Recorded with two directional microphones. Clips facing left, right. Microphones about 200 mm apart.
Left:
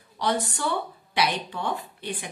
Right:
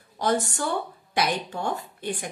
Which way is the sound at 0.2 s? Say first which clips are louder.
Right 2 dB; 45° right (ahead or behind).